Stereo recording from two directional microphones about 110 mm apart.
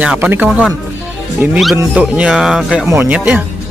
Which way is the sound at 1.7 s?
10° right (ahead or behind).